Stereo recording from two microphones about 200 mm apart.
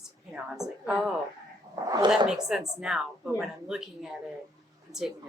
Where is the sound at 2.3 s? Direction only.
Centre (ahead or behind).